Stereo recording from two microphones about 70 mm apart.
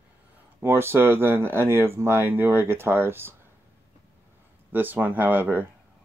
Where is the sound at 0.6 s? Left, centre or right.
Right.